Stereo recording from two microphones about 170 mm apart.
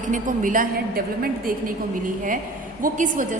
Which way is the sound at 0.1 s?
50° right (ahead or behind).